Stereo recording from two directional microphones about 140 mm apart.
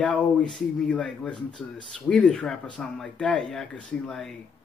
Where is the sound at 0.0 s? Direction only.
5° left (ahead or behind).